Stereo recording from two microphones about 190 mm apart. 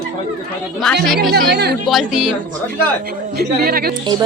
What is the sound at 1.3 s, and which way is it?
Speech, 60° right (ahead or behind).